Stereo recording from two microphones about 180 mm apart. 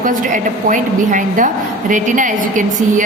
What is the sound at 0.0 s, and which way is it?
A woman's voice, 45° right (ahead or behind).